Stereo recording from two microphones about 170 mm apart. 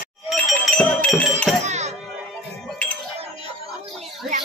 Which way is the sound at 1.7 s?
40° right (ahead or behind).